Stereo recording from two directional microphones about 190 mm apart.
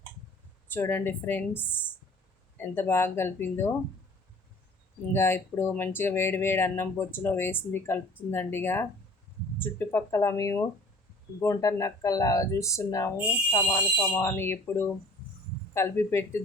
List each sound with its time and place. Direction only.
0.7 s speech: 10° left (ahead or behind)
5.1 s speech: 10° left (ahead or behind)